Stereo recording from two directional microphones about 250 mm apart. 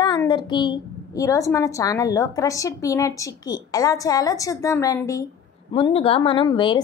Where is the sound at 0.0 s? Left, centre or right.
Centre.